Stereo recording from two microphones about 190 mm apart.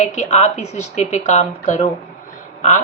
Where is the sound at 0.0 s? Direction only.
35° left (ahead or behind).